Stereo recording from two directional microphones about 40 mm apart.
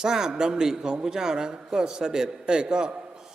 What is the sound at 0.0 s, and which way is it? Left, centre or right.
A man's voice, centre.